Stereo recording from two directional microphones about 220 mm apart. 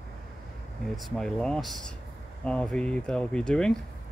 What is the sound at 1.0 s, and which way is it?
Speech, 5° left (ahead or behind).